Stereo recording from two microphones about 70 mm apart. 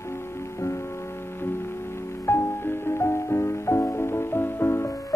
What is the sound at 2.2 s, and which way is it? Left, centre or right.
Music, left.